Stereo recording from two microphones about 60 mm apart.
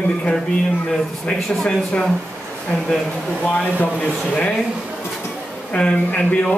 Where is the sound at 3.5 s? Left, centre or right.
Left.